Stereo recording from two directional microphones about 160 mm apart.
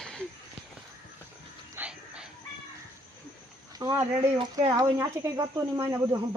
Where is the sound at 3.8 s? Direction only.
20° right (ahead or behind).